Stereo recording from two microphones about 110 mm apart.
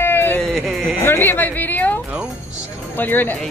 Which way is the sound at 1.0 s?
20° left (ahead or behind).